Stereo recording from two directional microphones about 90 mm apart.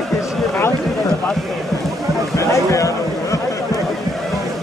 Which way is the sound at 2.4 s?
35° left (ahead or behind).